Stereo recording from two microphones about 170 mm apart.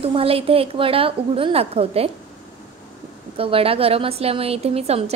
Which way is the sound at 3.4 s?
35° right (ahead or behind).